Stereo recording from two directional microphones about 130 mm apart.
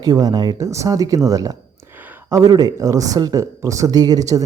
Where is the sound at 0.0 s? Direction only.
30° right (ahead or behind).